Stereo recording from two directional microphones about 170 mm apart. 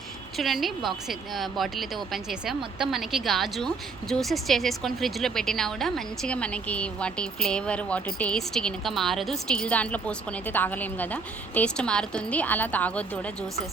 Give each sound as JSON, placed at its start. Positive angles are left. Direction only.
{"t": 0.3, "sound": "a woman's voice", "side_deg": 0}